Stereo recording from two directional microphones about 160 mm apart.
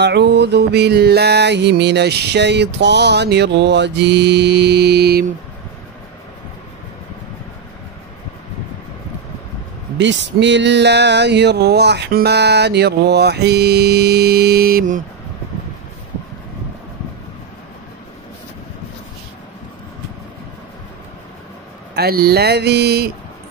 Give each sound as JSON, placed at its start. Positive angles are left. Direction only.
{"t": 0.0, "sound": "music", "side_deg": -90}
{"t": 9.9, "sound": "music", "side_deg": -90}
{"t": 21.9, "sound": "speech", "side_deg": -75}